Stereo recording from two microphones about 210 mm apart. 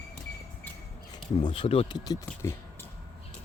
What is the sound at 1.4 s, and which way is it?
Speech, 25° left (ahead or behind).